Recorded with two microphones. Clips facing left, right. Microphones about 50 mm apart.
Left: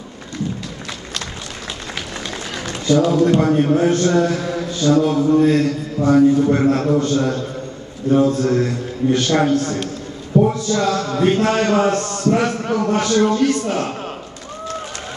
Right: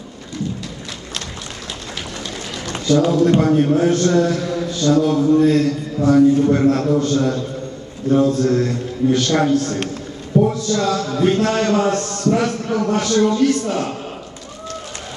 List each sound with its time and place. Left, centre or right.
3.3 s a man's voice: centre
10.3 s a sound: right
10.7 s a man's voice: centre